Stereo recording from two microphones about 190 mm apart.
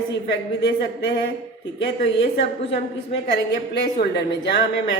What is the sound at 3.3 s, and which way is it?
Speech, 60° left (ahead or behind).